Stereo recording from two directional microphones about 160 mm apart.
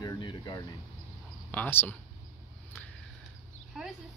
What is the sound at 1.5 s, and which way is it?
Speech, 10° left (ahead or behind).